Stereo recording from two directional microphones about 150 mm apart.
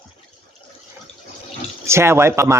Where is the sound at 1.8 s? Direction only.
15° right (ahead or behind).